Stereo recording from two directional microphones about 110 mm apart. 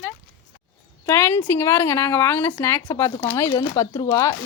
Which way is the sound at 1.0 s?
20° left (ahead or behind).